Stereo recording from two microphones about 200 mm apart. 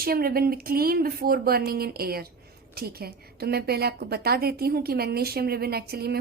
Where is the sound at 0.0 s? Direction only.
50° right (ahead or behind).